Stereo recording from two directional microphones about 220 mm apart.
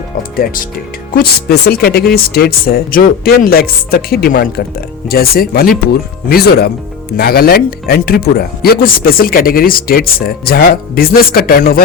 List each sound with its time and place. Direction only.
0.2 s speech: 40° left (ahead or behind)